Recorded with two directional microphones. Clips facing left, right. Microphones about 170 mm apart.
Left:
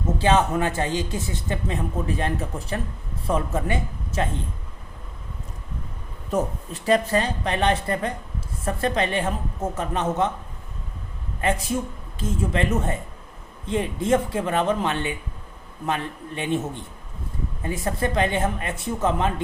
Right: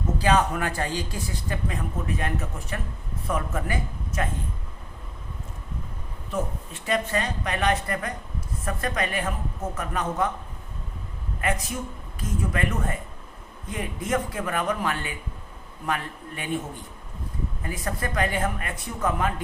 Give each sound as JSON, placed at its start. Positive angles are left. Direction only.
{"t": 0.2, "sound": "speech", "side_deg": 25}
{"t": 6.8, "sound": "speech", "side_deg": 35}
{"t": 11.3, "sound": "speech", "side_deg": 30}